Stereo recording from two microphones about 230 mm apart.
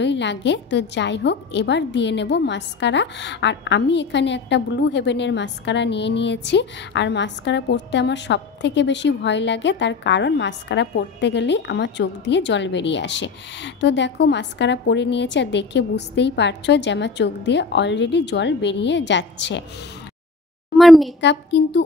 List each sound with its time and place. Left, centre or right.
0.0 s a woman's voice: left
20.7 s a woman's voice: centre
21.2 s a woman's voice: left